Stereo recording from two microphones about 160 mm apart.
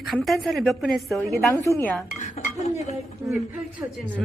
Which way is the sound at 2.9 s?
20° right (ahead or behind).